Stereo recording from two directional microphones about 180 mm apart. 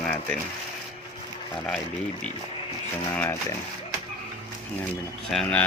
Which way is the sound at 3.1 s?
10° left (ahead or behind).